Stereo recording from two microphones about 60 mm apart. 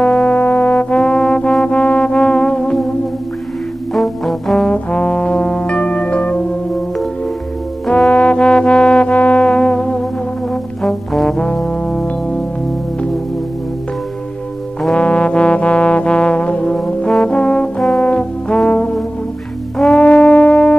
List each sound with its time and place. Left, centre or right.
0.0 s brass instrument: centre
3.9 s brass instrument: centre
4.6 s brass instrument: centre
7.8 s brass instrument: centre
8.1 s music: centre
10.5 s brass instrument: centre
15.0 s trombone: left
20.0 s music: centre